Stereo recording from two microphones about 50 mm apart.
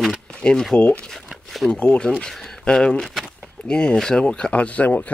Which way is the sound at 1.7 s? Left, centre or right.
Left.